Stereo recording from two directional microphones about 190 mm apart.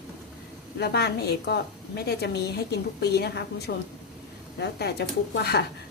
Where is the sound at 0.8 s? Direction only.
60° left (ahead or behind).